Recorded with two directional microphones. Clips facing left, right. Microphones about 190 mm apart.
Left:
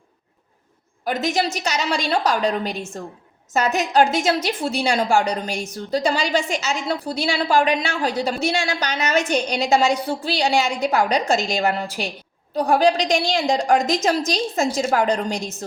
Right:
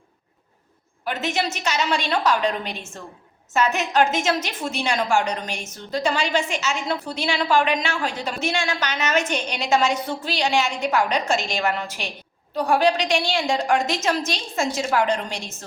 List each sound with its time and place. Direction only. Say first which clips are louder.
1.0 s a woman's voice: left 3 dB; 40° left (ahead or behind)